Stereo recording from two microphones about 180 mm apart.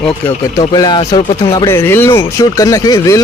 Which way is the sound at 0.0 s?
15° left (ahead or behind).